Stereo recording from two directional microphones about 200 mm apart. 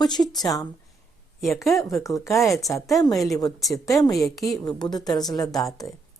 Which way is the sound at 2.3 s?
Centre (ahead or behind).